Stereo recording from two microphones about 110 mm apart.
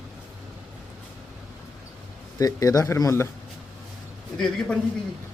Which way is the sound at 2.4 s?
35° left (ahead or behind).